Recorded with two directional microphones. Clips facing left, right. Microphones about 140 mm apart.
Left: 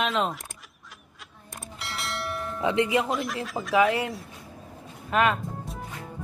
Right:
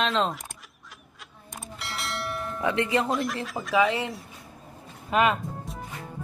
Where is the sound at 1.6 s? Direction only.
Centre (ahead or behind).